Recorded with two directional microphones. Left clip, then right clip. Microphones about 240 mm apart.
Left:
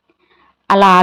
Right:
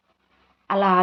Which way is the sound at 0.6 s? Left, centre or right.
Left.